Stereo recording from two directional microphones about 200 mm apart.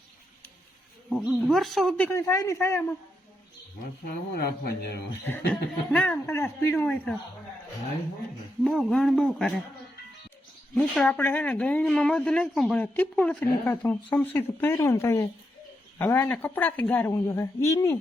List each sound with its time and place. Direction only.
1.1 s speech: 5° right (ahead or behind); by 2.8 s 15° left (ahead or behind)
4.4 s speech: 50° left (ahead or behind)
5.5 s speech: 5° left (ahead or behind)
8.6 s a man's voice: centre (ahead or behind)
10.8 s speech: 5° left (ahead or behind)